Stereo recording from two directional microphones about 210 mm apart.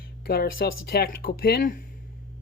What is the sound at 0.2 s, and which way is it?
Speech, 45° left (ahead or behind).